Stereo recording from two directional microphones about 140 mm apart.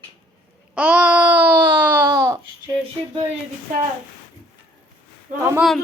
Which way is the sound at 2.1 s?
25° right (ahead or behind).